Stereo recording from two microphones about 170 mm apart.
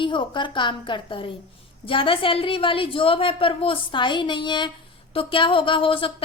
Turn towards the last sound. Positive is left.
turn(degrees=30)  # may be behind; listen again after turning